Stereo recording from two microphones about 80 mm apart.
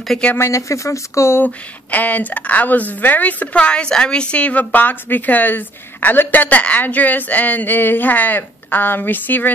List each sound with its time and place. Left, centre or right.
0.1 s speech: centre
0.4 s speech: left
1.4 s a woman's voice: left